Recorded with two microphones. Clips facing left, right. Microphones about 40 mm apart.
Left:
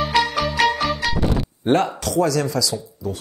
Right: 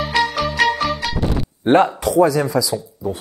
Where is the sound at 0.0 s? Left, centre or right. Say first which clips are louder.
Right 1 dB; centre.